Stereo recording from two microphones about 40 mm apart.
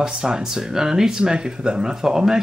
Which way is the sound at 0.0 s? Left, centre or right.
Centre.